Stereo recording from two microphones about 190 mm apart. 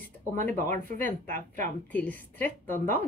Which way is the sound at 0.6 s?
45° right (ahead or behind).